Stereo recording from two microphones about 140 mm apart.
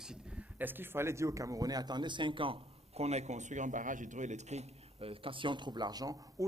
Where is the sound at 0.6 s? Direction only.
15° right (ahead or behind).